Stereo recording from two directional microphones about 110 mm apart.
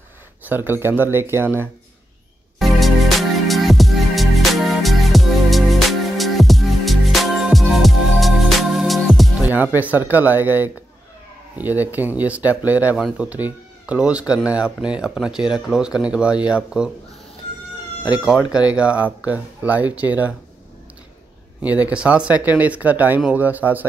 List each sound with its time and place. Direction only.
0.5 s speech: 20° right (ahead or behind)
2.6 s music: centre (ahead or behind)
9.8 s speech: 15° right (ahead or behind)
18.0 s speech: 10° right (ahead or behind)
21.5 s speech: 15° right (ahead or behind)